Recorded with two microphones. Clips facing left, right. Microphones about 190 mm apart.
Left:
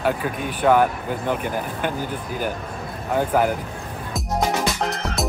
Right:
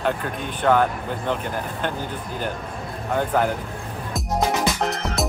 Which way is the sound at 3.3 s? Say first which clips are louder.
Left 2 dB; 10° left (ahead or behind).